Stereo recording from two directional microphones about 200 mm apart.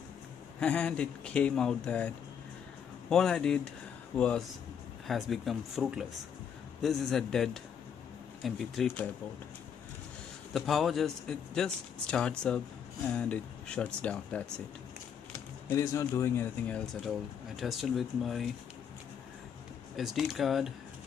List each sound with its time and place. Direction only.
0.6 s a man's voice: 5° left (ahead or behind)
10.5 s a man's voice: centre (ahead or behind)
15.7 s a man's voice: 15° left (ahead or behind); by 18.5 s centre (ahead or behind)
20.0 s a man's voice: centre (ahead or behind)